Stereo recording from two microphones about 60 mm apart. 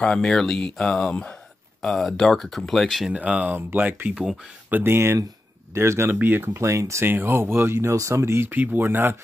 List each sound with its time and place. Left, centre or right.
0.0 s speech: centre
3.1 s speech: right
4.8 s speech: right
6.1 s speech: right
6.5 s speech: right
7.1 s speech: right
8.4 s speech: right